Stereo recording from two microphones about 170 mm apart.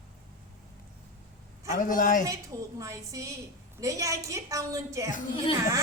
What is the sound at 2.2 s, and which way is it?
A woman's voice, 20° right (ahead or behind).